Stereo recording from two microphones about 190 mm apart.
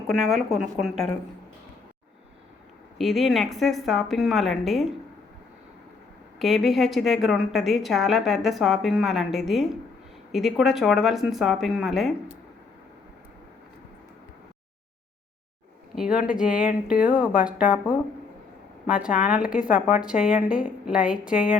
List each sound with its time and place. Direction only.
0.1 s a woman's voice: centre (ahead or behind)
3.0 s a woman's voice: centre (ahead or behind)
6.4 s a woman's voice: centre (ahead or behind)
16.0 s speech: 5° right (ahead or behind)
17.7 s speech: 25° left (ahead or behind)
18.9 s a woman's voice: 5° right (ahead or behind)